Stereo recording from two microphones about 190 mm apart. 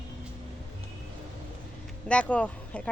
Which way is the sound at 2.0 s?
5° left (ahead or behind).